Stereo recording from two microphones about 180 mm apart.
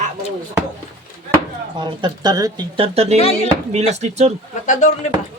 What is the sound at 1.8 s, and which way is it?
Speech, 25° right (ahead or behind).